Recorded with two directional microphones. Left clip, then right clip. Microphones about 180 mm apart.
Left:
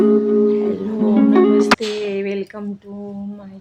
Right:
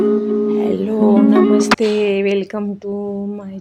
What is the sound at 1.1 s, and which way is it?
Music, centre (ahead or behind).